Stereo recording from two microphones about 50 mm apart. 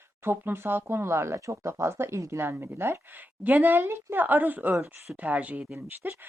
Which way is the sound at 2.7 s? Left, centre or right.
Right.